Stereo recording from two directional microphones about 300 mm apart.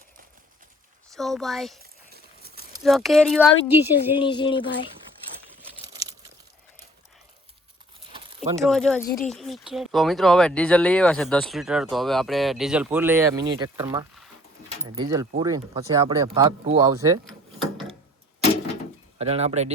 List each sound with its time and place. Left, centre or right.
1.1 s speech: centre
1.8 s a sound: right
2.8 s speech: centre
4.2 s speech: centre
8.4 s speech: centre
17.2 s mechanisms: centre
19.2 s speech: centre